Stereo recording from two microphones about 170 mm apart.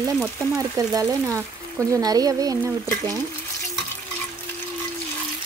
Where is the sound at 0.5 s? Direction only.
20° right (ahead or behind).